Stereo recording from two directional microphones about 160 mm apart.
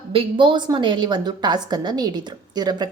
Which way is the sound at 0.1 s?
35° right (ahead or behind).